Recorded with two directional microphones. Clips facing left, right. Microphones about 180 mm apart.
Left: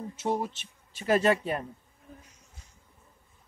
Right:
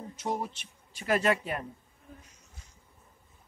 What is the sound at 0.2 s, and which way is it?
A man's voice, 25° left (ahead or behind).